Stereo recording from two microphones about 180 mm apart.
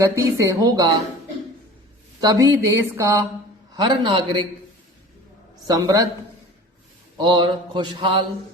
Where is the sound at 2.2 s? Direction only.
20° right (ahead or behind).